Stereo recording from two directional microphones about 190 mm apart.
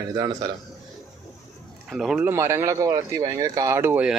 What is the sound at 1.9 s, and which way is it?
Speech, centre (ahead or behind).